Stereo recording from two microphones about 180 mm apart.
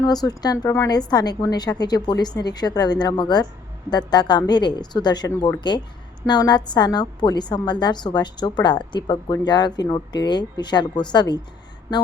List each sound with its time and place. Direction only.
0.0 s a woman's voice: 20° left (ahead or behind)